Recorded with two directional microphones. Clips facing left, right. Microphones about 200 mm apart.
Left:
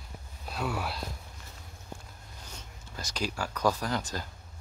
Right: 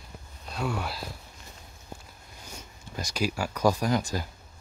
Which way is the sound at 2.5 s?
10° right (ahead or behind).